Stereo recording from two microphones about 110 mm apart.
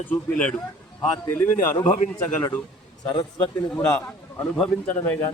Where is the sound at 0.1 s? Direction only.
10° left (ahead or behind).